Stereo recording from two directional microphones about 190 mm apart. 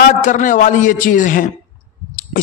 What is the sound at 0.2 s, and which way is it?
A man's voice, 40° left (ahead or behind).